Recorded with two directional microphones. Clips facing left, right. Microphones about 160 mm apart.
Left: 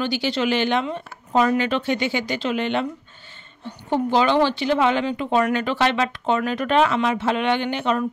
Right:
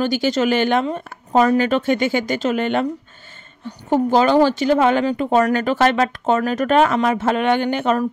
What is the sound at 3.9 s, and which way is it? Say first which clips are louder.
Speech: right 4 dB; 45° right (ahead or behind).